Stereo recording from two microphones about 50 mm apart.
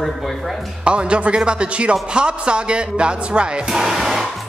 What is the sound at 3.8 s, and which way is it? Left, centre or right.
Hair dryer, centre.